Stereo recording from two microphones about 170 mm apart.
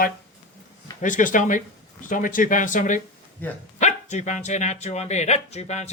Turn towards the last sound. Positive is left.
turn(degrees=40)  # may be behind; listen again after turning